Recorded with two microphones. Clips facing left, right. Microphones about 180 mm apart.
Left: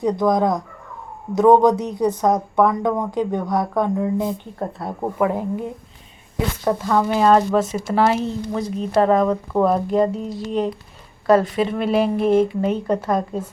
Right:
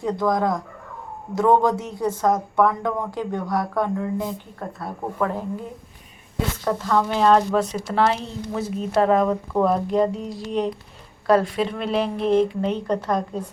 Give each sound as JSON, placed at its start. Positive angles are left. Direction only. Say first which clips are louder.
{"t": 0.0, "sound": "speech", "louder": "left 4 dB", "side_deg": 15}